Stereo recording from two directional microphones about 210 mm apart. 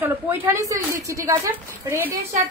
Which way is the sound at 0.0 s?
10° right (ahead or behind).